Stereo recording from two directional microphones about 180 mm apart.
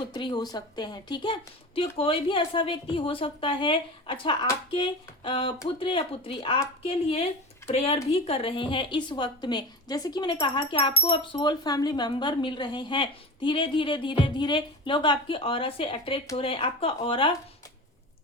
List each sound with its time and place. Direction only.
0.1 s speech: 25° left (ahead or behind)